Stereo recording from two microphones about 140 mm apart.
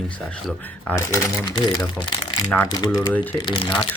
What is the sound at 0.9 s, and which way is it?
Speech, 20° left (ahead or behind).